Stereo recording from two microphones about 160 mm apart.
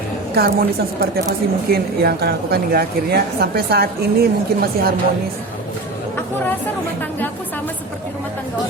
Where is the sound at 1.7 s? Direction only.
75° right (ahead or behind).